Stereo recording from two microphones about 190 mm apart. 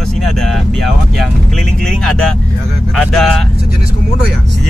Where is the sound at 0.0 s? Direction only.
Centre (ahead or behind).